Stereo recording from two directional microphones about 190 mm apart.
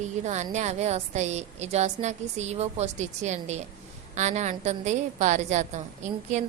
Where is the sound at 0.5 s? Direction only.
35° right (ahead or behind).